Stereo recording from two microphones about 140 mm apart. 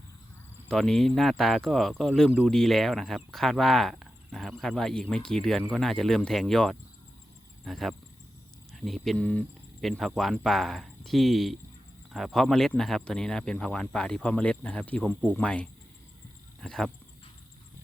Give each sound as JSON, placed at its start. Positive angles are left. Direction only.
{"t": 0.7, "sound": "speech", "side_deg": 5}